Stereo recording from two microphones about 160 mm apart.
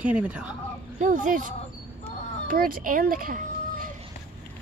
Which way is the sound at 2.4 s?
65° right (ahead or behind).